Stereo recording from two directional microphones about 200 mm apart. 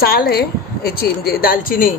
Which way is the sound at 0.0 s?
50° left (ahead or behind).